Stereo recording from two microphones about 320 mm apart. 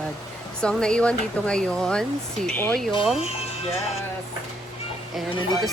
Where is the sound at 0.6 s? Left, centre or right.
Centre.